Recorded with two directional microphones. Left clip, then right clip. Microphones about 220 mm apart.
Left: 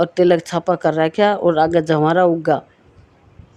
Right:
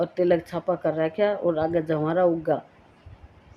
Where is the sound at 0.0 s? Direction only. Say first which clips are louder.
Left 8 dB; 50° left (ahead or behind).